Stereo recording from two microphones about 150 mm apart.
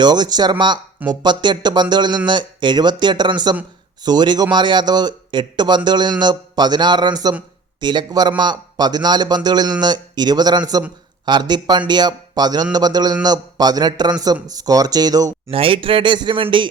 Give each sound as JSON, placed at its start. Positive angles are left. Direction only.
{"t": 0.0, "sound": "a man's voice", "side_deg": -30}
{"t": 15.4, "sound": "speech", "side_deg": -40}